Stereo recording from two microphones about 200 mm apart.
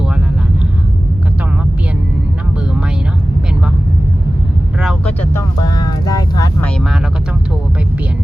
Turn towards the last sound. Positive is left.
turn(degrees=0)  # may be behind; listen again after turning